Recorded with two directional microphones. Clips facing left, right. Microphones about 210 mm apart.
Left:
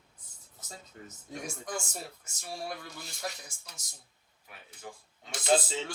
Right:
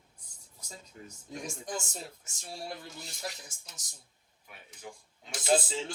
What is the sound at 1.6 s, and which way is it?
Speech, 25° right (ahead or behind).